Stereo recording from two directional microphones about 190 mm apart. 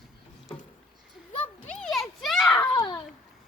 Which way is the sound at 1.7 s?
5° left (ahead or behind).